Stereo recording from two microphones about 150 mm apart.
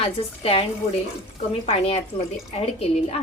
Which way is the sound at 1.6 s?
40° left (ahead or behind).